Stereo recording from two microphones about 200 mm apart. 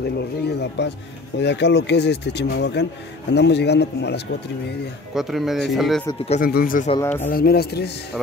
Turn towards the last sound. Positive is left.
turn(degrees=55)  # may be behind; listen again after turning